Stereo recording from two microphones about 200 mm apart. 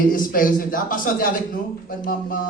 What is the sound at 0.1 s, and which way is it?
A man's voice, 45° left (ahead or behind).